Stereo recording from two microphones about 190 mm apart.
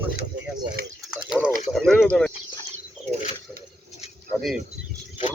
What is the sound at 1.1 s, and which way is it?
Speech, 5° right (ahead or behind).